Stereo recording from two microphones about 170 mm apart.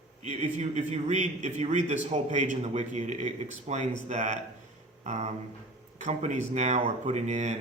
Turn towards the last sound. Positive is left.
turn(degrees=-45)  # may be behind; listen again after turning